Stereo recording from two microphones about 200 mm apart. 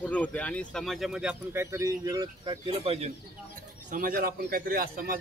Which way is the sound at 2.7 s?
30° right (ahead or behind).